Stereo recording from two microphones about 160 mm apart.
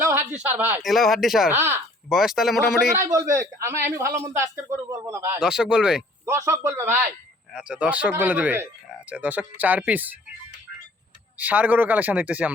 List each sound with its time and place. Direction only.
0.0 s a sound: 15° right (ahead or behind)
0.4 s speech: 10° right (ahead or behind)
0.8 s speech: centre (ahead or behind)
1.5 s speech: 15° right (ahead or behind)
2.0 s speech: centre (ahead or behind)
3.0 s a man's voice: 20° right (ahead or behind)
5.4 s speech: 5° right (ahead or behind)
6.2 s speech: 15° right (ahead or behind)
7.5 s speech: 5° right (ahead or behind)
11.3 s speech: 10° right (ahead or behind)